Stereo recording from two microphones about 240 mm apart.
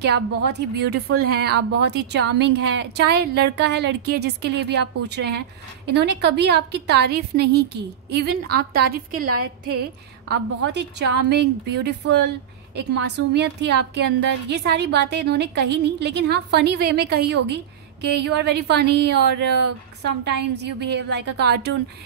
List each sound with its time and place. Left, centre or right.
0.0 s a woman's voice: right